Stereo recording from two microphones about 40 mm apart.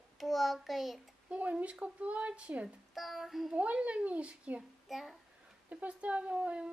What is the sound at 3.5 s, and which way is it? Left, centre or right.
Speech, right.